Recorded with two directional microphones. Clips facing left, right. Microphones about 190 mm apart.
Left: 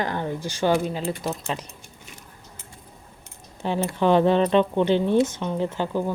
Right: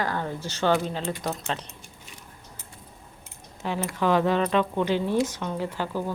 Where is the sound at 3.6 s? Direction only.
30° left (ahead or behind).